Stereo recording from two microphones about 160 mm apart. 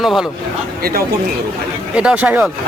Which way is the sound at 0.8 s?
70° right (ahead or behind).